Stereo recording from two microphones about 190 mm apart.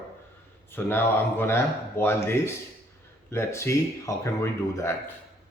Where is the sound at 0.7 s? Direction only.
10° left (ahead or behind).